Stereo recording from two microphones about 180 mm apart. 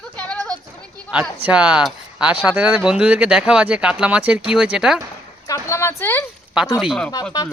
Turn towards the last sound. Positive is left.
turn(degrees=20)  # may be behind; listen again after turning